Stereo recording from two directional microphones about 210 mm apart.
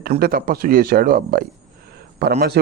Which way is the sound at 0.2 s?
45° right (ahead or behind).